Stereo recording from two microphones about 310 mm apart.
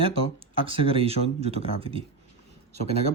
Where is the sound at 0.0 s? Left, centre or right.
Centre.